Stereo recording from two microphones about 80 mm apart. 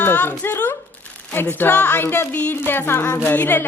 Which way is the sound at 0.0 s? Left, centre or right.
Left.